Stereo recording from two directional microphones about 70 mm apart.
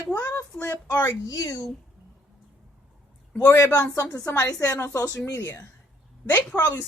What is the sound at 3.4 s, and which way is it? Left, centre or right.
Speech, left.